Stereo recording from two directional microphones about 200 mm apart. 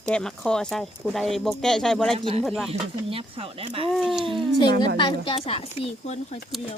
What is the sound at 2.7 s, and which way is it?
Speech, 30° right (ahead or behind).